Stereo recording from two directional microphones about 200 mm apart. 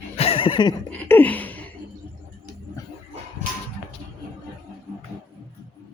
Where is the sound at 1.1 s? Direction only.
10° left (ahead or behind).